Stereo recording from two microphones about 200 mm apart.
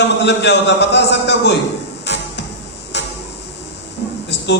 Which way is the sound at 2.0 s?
60° left (ahead or behind).